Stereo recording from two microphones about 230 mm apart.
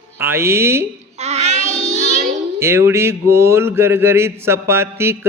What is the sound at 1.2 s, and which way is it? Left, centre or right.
Child singing, right.